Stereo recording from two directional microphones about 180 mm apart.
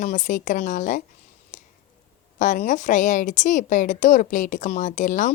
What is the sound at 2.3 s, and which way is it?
A woman's voice, 45° left (ahead or behind).